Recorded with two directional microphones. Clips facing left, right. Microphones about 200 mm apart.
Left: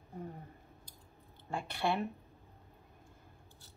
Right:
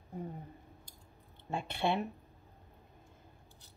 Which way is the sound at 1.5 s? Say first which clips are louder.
Right 1 dB; 25° right (ahead or behind).